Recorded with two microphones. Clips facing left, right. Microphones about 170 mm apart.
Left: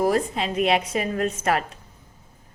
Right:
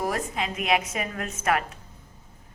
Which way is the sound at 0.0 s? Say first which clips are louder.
Left 6 dB; 30° left (ahead or behind).